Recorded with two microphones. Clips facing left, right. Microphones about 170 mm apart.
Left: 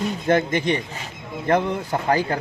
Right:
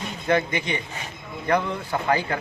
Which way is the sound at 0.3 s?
45° left (ahead or behind).